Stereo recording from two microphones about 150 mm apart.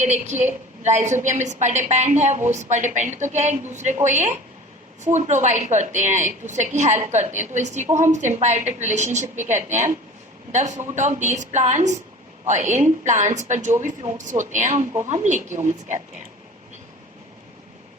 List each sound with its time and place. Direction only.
0.0 s a woman's voice: 50° right (ahead or behind)